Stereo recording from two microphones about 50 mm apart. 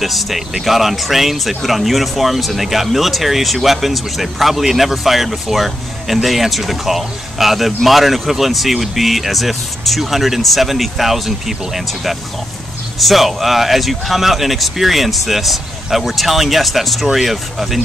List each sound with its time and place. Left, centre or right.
0.0 s speech: centre